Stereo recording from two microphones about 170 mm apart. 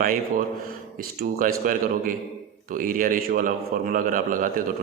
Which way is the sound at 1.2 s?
55° right (ahead or behind).